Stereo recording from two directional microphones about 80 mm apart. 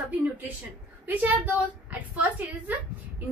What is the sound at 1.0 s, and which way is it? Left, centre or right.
A woman's voice, right.